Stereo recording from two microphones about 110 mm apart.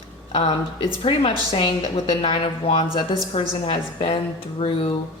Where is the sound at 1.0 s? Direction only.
50° left (ahead or behind).